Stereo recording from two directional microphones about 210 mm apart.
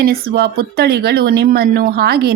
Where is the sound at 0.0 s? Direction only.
45° right (ahead or behind).